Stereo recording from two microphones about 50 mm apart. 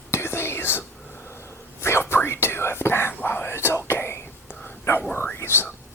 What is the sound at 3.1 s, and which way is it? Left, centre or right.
Whispering, left.